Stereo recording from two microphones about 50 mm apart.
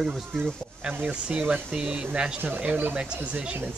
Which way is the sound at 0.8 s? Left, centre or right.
Right.